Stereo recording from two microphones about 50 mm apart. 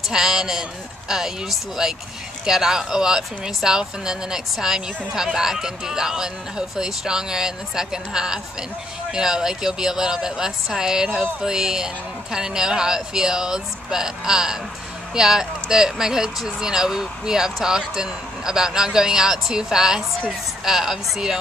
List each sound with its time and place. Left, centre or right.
0.1 s speech: centre